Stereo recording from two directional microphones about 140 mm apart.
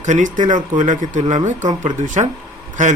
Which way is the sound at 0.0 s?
60° right (ahead or behind).